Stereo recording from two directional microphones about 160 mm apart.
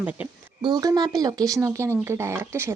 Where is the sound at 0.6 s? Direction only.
25° right (ahead or behind).